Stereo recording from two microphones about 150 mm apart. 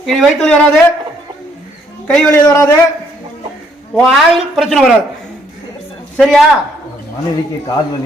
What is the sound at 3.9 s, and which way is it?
A woman's voice, centre (ahead or behind).